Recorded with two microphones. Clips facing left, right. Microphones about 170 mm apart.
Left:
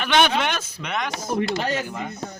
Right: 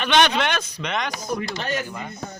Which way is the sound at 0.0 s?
10° left (ahead or behind).